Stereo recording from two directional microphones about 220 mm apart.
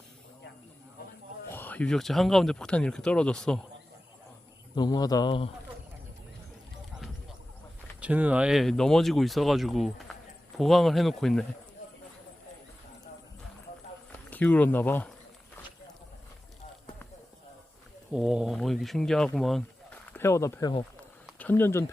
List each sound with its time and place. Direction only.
1.5 s speech: 10° left (ahead or behind)
4.7 s speech: 20° left (ahead or behind)
8.0 s speech: 5° right (ahead or behind)
14.3 s speech: 5° left (ahead or behind)
18.1 s speech: 5° right (ahead or behind)
20.1 s speech: 10° left (ahead or behind)
21.2 s a sound: 5° left (ahead or behind)